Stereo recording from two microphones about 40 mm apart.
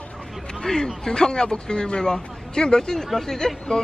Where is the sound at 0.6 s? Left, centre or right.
Centre.